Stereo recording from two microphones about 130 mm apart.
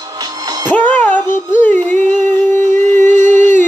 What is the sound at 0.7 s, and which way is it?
Music, 10° left (ahead or behind).